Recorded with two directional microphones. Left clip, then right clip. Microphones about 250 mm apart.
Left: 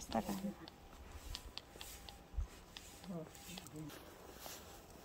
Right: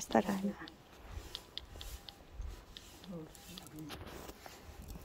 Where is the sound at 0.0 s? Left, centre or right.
Centre.